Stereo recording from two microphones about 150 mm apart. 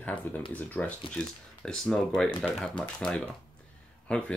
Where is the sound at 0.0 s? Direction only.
10° left (ahead or behind).